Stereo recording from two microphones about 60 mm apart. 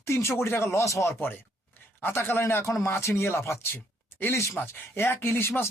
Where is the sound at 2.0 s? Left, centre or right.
Left.